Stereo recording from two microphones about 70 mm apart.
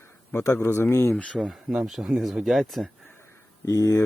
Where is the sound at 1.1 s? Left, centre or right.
Centre.